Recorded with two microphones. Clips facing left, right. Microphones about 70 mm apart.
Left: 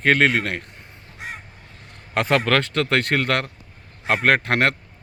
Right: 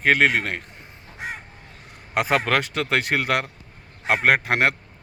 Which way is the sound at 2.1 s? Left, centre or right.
Centre.